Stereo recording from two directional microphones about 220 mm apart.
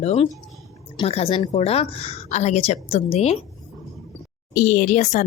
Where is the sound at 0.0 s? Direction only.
30° left (ahead or behind).